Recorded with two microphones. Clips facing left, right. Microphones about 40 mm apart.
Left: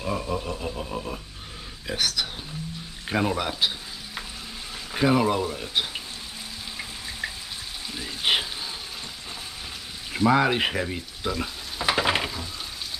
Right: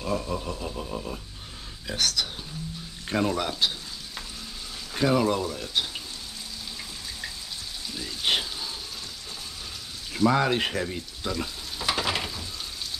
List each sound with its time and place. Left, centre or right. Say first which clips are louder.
0.0 s grunt: left 1 dB; centre
3.1 s speech: left 1 dB; centre
4.9 s grunt: left 2 dB; centre
7.9 s frying: left 2 dB; centre
10.1 s frying: left 2 dB; centre
11.9 s frying: left 4 dB; left